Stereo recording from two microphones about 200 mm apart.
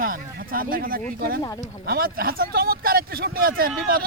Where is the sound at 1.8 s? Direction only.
50° right (ahead or behind).